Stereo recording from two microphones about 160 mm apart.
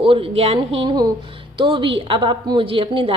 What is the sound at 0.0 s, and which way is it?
Speech, 35° right (ahead or behind).